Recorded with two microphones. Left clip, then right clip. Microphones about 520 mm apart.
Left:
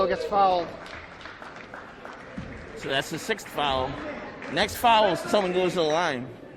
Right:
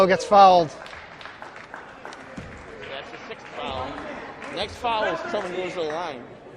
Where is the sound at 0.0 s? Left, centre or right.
Right.